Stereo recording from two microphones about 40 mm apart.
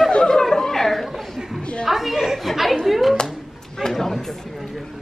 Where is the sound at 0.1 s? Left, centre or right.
Centre.